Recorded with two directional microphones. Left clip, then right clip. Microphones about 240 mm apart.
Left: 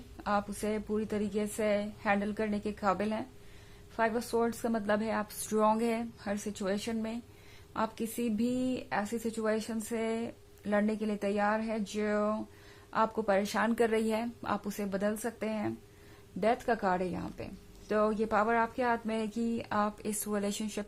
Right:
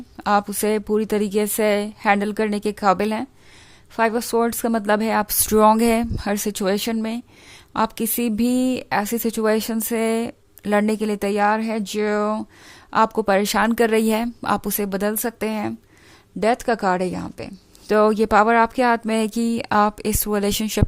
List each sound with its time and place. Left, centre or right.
0.2 s a woman's voice: right